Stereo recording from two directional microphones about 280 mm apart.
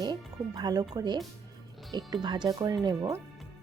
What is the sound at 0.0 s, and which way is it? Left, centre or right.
Music, centre.